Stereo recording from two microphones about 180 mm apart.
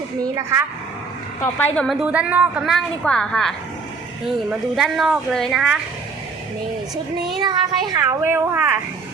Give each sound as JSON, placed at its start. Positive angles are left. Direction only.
{"t": 1.5, "sound": "a woman's voice", "side_deg": 10}
{"t": 2.0, "sound": "a woman's voice", "side_deg": -5}
{"t": 7.4, "sound": "a child's voice", "side_deg": -20}